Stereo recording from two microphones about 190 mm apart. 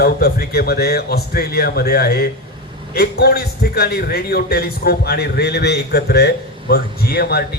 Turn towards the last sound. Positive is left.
turn(degrees=55)  # may be behind; listen again after turning